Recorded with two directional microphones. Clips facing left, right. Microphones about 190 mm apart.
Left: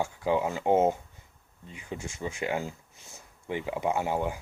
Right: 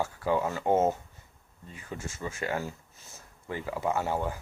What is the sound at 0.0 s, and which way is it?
Speech, 15° left (ahead or behind).